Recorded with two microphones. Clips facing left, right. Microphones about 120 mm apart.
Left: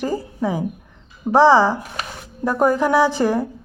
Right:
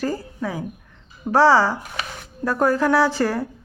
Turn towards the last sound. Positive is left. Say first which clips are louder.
# left 3 dB
turn(degrees=15)  # may be behind; listen again after turning